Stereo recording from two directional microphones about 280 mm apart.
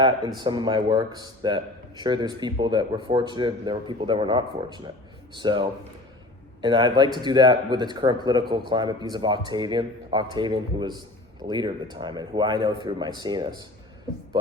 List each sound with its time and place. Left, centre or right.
0.0 s a man's voice: centre